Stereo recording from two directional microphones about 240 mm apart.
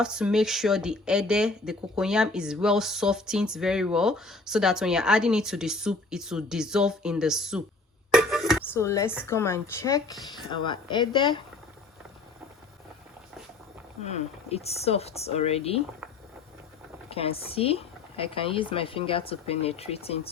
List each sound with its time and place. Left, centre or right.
0.0 s speech: centre
8.1 s music: centre
8.7 s speech: centre
14.0 s speech: left
17.1 s speech: left